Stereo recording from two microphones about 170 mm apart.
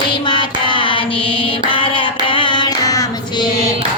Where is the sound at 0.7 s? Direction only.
30° left (ahead or behind).